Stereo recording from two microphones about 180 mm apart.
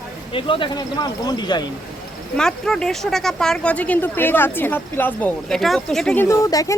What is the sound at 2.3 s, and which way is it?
Speech, 5° left (ahead or behind).